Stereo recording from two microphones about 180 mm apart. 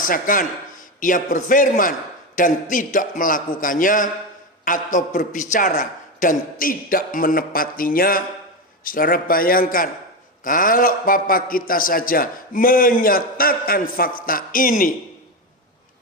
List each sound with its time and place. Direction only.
0.1 s a man's voice: 50° left (ahead or behind)